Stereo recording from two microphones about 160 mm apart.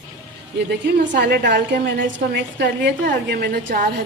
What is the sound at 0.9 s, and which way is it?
A woman's voice, 90° right.